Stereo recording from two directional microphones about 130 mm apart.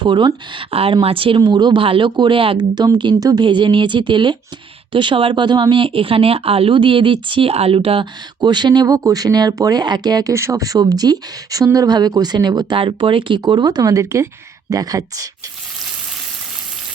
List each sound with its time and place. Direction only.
0.0 s speech: 35° right (ahead or behind)
0.7 s speech: 45° right (ahead or behind)
8.4 s speech: 35° right (ahead or behind)